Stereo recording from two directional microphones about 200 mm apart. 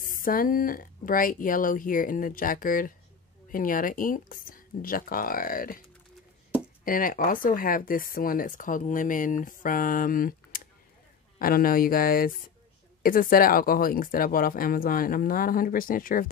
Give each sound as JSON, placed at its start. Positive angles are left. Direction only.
{"t": 0.0, "sound": "speech", "side_deg": 45}
{"t": 6.8, "sound": "speech", "side_deg": 45}